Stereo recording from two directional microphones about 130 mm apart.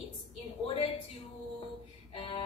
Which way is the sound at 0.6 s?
45° left (ahead or behind).